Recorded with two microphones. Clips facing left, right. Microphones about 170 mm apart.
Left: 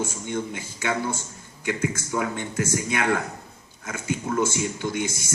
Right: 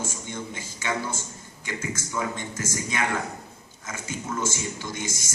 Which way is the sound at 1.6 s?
60° left (ahead or behind).